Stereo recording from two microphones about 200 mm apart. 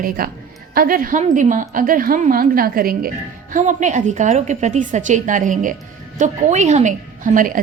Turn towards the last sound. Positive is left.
turn(degrees=-40)  # may be behind; listen again after turning